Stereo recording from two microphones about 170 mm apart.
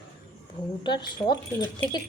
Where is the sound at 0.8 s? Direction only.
25° left (ahead or behind).